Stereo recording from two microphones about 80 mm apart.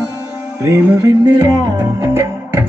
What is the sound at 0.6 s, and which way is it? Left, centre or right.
Music, right.